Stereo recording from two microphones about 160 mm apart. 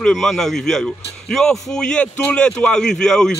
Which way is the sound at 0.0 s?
Centre (ahead or behind).